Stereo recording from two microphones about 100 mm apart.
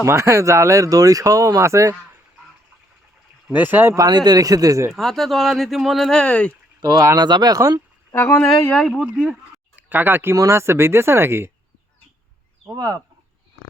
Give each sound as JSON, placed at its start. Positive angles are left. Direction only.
{"t": 0.0, "sound": "speech", "side_deg": -30}
{"t": 3.4, "sound": "speech", "side_deg": -15}
{"t": 3.9, "sound": "speech", "side_deg": -40}
{"t": 4.9, "sound": "speech", "side_deg": 0}
{"t": 6.8, "sound": "speech", "side_deg": -45}
{"t": 8.1, "sound": "speech", "side_deg": 25}
{"t": 8.7, "sound": "speech", "side_deg": 5}
{"t": 9.7, "sound": "speech", "side_deg": -20}
{"t": 10.3, "sound": "speech", "side_deg": -30}
{"t": 12.7, "sound": "speech", "side_deg": -40}